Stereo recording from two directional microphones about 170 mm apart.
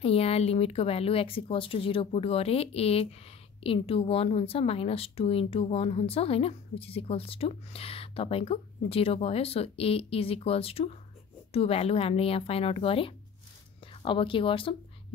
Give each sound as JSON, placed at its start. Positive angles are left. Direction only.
{"t": 0.0, "sound": "speech", "side_deg": 35}